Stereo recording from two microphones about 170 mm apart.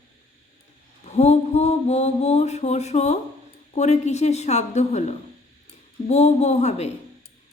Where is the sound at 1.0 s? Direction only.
40° left (ahead or behind).